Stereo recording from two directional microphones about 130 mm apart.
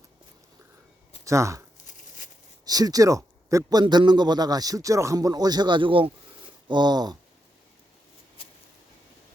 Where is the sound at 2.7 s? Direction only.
30° right (ahead or behind).